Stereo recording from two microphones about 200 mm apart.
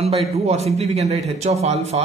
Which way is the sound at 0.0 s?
30° right (ahead or behind).